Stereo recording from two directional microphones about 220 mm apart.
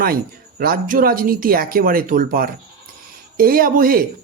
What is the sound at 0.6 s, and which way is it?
Speech, 40° right (ahead or behind).